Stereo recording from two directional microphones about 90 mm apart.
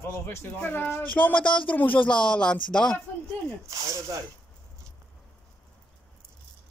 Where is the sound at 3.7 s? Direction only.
40° right (ahead or behind).